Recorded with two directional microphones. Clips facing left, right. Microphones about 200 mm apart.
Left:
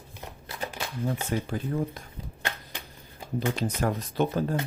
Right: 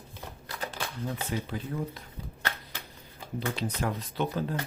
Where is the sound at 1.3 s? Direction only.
50° left (ahead or behind).